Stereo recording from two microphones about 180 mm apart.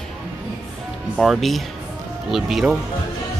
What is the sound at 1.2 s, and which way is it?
Speech, centre (ahead or behind).